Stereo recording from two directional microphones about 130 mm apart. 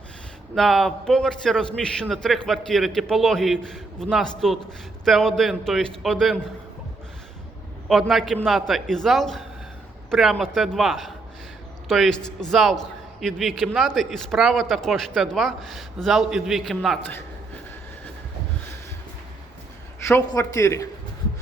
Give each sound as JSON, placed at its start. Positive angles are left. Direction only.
{"t": 0.5, "sound": "a man's voice", "side_deg": 0}
{"t": 7.9, "sound": "a man's voice", "side_deg": 0}
{"t": 20.1, "sound": "speech", "side_deg": 20}